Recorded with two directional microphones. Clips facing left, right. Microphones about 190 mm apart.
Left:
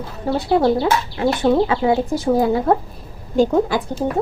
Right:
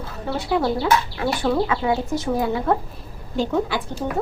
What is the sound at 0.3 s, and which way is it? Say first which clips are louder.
Speech: left 6 dB; 40° left (ahead or behind).